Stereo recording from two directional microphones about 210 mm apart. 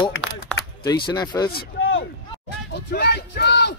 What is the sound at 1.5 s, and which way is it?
Speech, 45° left (ahead or behind).